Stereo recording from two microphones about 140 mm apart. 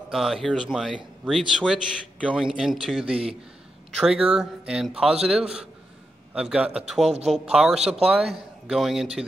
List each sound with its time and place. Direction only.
0.1 s a man's voice: centre (ahead or behind)